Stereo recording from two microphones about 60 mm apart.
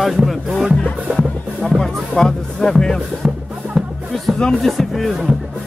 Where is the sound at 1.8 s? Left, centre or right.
Centre.